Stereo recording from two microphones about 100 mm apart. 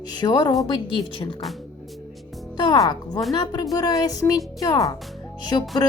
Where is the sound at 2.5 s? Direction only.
45° left (ahead or behind).